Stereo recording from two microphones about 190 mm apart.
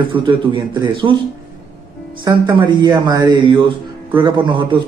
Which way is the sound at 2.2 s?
25° right (ahead or behind).